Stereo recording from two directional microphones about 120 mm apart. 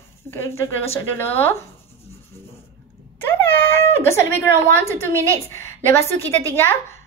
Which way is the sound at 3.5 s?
20° left (ahead or behind).